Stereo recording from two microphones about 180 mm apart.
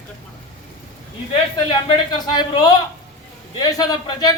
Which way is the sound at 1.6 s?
30° left (ahead or behind).